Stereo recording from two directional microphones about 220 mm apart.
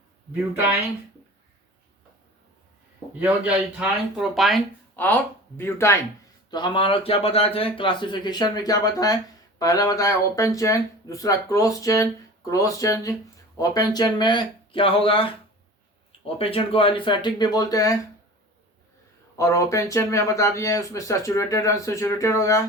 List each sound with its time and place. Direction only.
0.5 s speech: 10° right (ahead or behind)
3.2 s speech: 5° right (ahead or behind); by 17.9 s 15° left (ahead or behind)
19.4 s speech: 15° left (ahead or behind)